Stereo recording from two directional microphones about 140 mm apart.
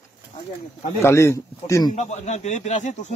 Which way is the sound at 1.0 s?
20° left (ahead or behind).